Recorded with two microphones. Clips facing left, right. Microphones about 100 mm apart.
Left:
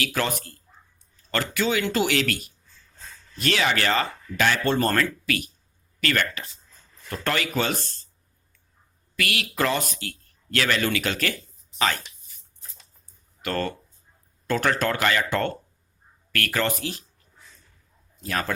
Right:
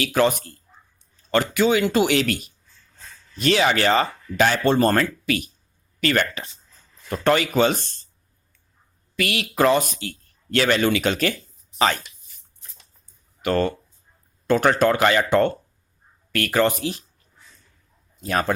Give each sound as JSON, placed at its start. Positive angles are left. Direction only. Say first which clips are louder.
{"t": 0.0, "sound": "speech", "louder": "right 7 dB", "side_deg": -20}
{"t": 9.1, "sound": "a man's voice", "louder": "right 5 dB", "side_deg": -25}
{"t": 13.4, "sound": "speech", "louder": "right 6 dB", "side_deg": -20}
{"t": 18.2, "sound": "speech", "louder": "right 6 dB", "side_deg": -25}